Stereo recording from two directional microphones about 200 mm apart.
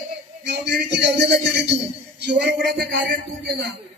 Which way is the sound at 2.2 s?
55° right (ahead or behind).